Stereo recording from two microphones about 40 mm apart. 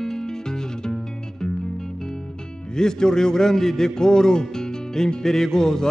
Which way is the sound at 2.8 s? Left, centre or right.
Centre.